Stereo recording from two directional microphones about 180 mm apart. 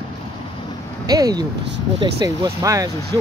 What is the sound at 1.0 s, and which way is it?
Speech, 20° right (ahead or behind).